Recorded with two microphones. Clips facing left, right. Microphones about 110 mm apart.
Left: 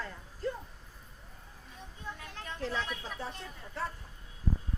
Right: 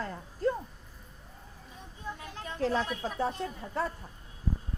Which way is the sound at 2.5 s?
40° right (ahead or behind).